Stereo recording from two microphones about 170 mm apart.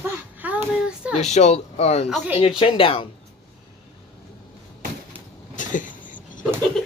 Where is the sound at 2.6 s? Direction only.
30° left (ahead or behind).